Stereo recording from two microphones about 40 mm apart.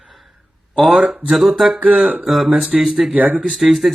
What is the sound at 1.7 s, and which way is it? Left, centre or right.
Speech, right.